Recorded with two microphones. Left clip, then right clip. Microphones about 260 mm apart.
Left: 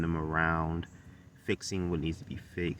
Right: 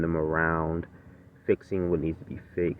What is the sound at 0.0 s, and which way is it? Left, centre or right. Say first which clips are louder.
Speech: right 5 dB; left.